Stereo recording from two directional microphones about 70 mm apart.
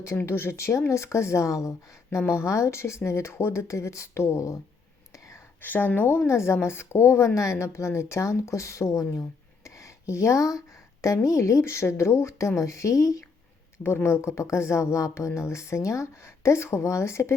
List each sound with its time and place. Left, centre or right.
0.2 s a woman's voice: left
5.6 s a woman's voice: left
9.6 s a sound: left
11.0 s speech: left
13.8 s a woman's voice: left